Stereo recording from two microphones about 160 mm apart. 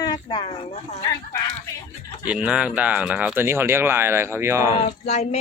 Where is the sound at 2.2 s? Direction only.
10° right (ahead or behind).